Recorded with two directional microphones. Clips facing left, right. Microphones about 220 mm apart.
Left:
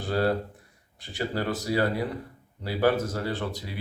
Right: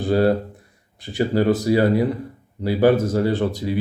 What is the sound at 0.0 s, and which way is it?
Speech, 15° right (ahead or behind).